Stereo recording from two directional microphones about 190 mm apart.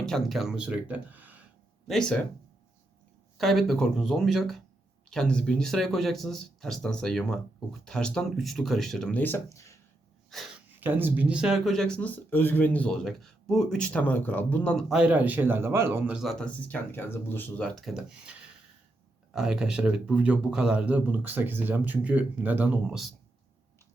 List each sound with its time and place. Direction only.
0.0 s speech: centre (ahead or behind)
1.9 s speech: 5° left (ahead or behind)
3.3 s speech: centre (ahead or behind)
10.2 s speech: centre (ahead or behind)
10.8 s speech: 10° right (ahead or behind)